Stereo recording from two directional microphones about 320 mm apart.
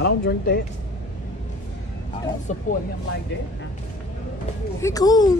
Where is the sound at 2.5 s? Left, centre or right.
Left.